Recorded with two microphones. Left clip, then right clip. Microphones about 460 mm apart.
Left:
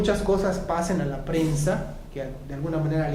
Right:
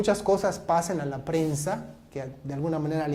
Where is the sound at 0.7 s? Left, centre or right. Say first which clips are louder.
Right 5 dB; right.